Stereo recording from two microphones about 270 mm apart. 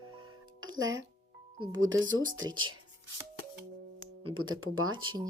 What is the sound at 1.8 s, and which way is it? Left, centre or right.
Speech, right.